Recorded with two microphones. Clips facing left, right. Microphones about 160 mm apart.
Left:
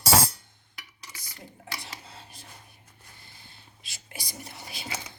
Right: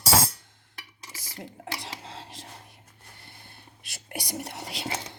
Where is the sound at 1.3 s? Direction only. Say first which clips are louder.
Right 5 dB; 90° right.